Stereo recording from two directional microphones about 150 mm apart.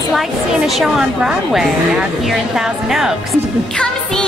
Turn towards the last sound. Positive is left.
turn(degrees=-5)  # may be behind; listen again after turning